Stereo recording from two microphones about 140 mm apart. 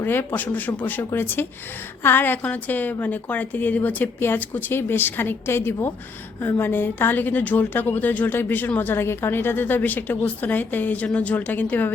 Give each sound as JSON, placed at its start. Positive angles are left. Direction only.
{"t": 0.0, "sound": "a woman's voice", "side_deg": 15}